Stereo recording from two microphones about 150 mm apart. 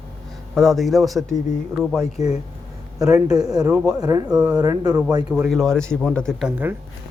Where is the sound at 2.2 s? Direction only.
25° right (ahead or behind).